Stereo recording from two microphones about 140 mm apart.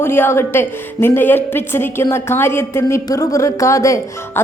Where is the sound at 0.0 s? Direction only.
15° left (ahead or behind).